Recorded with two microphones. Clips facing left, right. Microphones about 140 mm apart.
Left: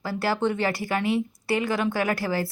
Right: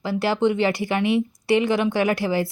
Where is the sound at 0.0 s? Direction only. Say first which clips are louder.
Right 4 dB; 20° right (ahead or behind).